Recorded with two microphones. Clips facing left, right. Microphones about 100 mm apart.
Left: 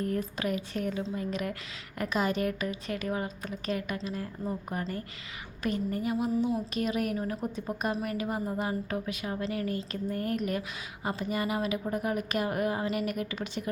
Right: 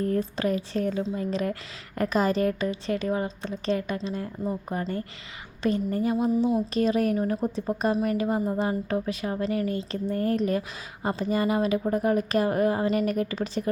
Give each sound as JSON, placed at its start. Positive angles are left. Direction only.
{"t": 0.0, "sound": "a woman's voice", "side_deg": -30}